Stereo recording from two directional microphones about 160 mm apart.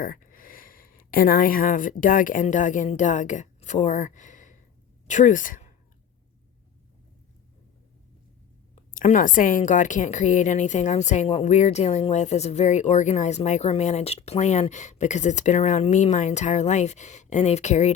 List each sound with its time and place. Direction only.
0.0 s a woman's voice: 60° left (ahead or behind)
8.7 s a woman's voice: 50° left (ahead or behind)